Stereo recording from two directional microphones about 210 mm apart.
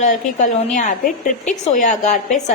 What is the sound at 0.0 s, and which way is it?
A woman's voice, 35° left (ahead or behind).